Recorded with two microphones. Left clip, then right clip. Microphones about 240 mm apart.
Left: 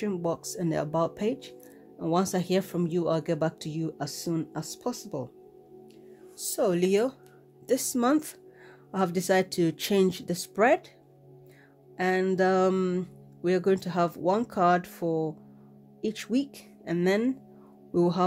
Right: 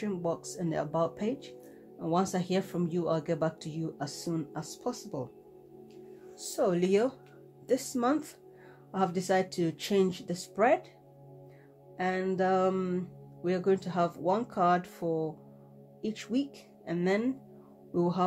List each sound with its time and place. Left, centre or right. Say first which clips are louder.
0.0 s speech: left 3 dB; left
6.3 s speech: left 3 dB; left
12.0 s speech: left 5 dB; left